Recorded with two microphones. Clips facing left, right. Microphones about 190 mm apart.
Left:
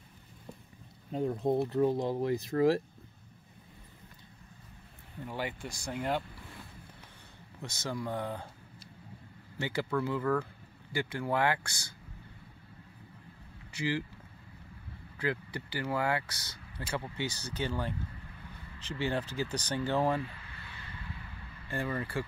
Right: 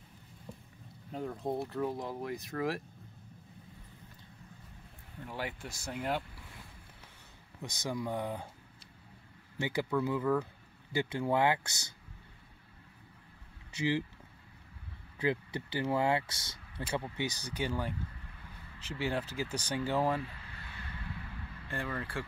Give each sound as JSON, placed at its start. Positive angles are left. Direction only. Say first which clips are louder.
{"t": 1.1, "sound": "speech", "louder": "left 6 dB", "side_deg": 20}
{"t": 5.2, "sound": "speech", "louder": "left 3 dB", "side_deg": 0}
{"t": 7.6, "sound": "speech", "louder": "even", "side_deg": -15}
{"t": 9.6, "sound": "speech", "louder": "even", "side_deg": -15}
{"t": 13.7, "sound": "speech", "louder": "right 1 dB", "side_deg": -20}
{"t": 15.1, "sound": "speech", "louder": "right 2 dB", "side_deg": -20}
{"t": 21.6, "sound": "speech", "louder": "left 4 dB", "side_deg": 5}